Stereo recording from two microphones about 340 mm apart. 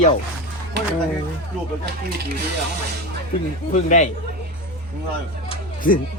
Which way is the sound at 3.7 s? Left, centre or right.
Left.